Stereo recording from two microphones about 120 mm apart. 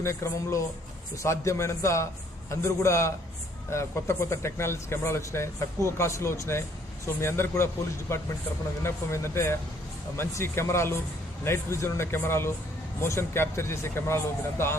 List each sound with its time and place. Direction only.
0.0 s speech: 25° left (ahead or behind)